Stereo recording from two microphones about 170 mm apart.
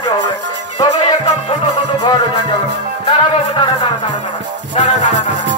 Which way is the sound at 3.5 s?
25° left (ahead or behind).